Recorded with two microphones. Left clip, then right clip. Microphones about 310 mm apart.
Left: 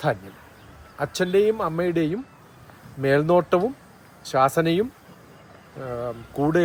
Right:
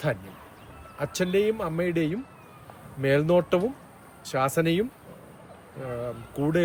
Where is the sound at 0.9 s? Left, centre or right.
Centre.